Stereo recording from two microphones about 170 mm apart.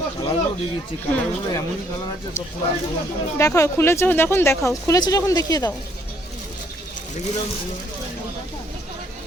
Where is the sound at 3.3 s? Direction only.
15° left (ahead or behind).